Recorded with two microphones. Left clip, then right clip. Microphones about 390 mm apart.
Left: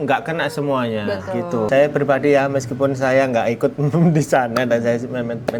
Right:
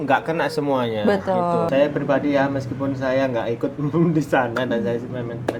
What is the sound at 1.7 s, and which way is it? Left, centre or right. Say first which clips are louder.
Speech: left 8 dB; left.